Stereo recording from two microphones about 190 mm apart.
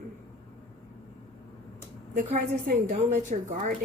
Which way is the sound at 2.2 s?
50° right (ahead or behind).